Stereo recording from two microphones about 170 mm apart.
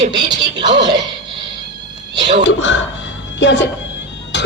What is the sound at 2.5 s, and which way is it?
A man's voice, 90° left.